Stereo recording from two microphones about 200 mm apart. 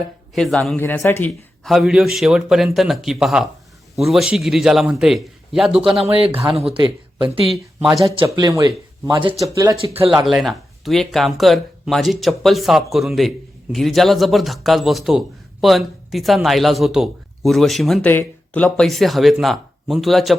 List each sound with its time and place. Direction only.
0.3 s speech: centre (ahead or behind)
1.6 s speech: centre (ahead or behind)
6.0 s speech: 30° right (ahead or behind)
10.2 s speech: centre (ahead or behind)